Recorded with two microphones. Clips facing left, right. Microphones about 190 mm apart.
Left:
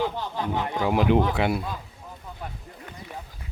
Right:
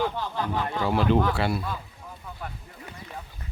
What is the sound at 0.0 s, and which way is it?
Speech, 15° left (ahead or behind).